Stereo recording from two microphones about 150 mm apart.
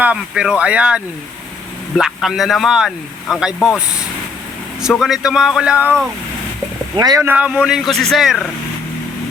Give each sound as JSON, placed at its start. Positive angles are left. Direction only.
{"t": 0.0, "sound": "speech", "side_deg": -5}
{"t": 4.9, "sound": "speech", "side_deg": 0}
{"t": 6.9, "sound": "speech", "side_deg": -25}
{"t": 7.3, "sound": "speech", "side_deg": -10}